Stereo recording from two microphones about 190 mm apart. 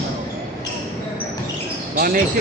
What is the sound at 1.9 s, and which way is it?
Basketball bounce, 50° right (ahead or behind).